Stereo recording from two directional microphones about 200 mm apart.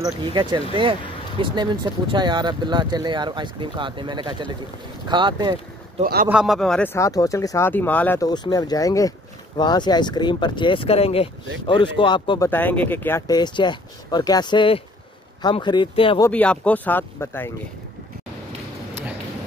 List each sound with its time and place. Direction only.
0.0 s speech: 20° right (ahead or behind)
6.2 s speech: 5° right (ahead or behind); by 12.4 s 25° left (ahead or behind)
12.4 s speech: 10° left (ahead or behind)
13.3 s speech: 20° left (ahead or behind)
16.2 s speech: 10° left (ahead or behind)